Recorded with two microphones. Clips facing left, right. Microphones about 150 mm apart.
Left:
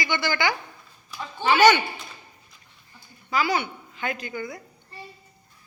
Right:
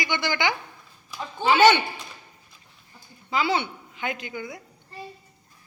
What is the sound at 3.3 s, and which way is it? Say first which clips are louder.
A woman's voice: even; 25° right (ahead or behind).